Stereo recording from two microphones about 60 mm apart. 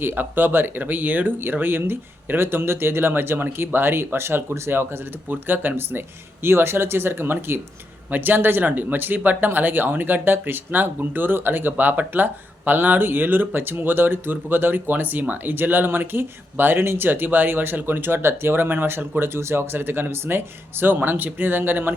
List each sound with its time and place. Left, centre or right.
0.0 s speech: right